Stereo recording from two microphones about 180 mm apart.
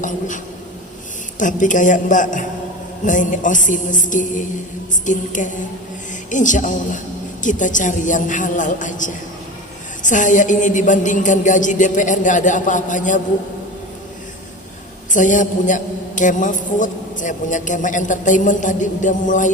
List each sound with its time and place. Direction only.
1.4 s a man's voice: 45° left (ahead or behind)
15.1 s a man's voice: 45° left (ahead or behind)